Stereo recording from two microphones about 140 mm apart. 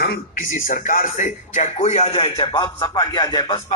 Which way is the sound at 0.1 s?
80° left.